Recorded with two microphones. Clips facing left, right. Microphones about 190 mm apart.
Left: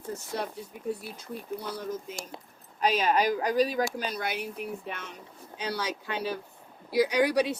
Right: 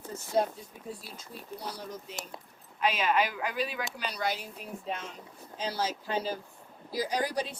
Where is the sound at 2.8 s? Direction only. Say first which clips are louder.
Left 3 dB; 40° left (ahead or behind).